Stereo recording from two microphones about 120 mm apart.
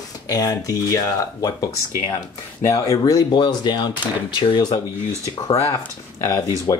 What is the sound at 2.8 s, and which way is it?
Speech, 30° left (ahead or behind).